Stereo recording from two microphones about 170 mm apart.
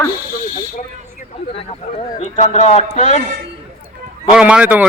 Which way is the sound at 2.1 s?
45° left (ahead or behind).